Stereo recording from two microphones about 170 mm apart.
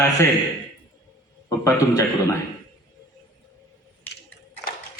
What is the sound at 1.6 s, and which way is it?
Speech, 20° left (ahead or behind).